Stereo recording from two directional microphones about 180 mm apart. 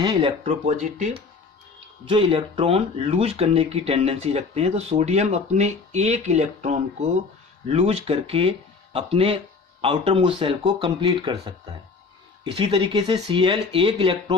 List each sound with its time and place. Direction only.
0.0 s speech: 20° right (ahead or behind)
0.4 s speech: 40° right (ahead or behind)
2.0 s speech: 25° right (ahead or behind)
12.5 s speech: 30° right (ahead or behind)